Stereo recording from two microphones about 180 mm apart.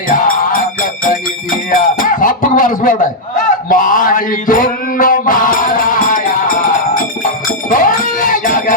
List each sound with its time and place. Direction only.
0.1 s music: 50° left (ahead or behind)
1.7 s music: 45° left (ahead or behind)
3.7 s mantra: 45° left (ahead or behind)
7.7 s music: 50° left (ahead or behind)